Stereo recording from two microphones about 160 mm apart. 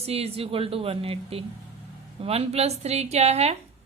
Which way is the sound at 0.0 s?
40° right (ahead or behind).